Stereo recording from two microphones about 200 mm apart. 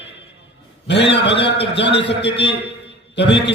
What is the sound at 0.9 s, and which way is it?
A man's voice, 60° left (ahead or behind).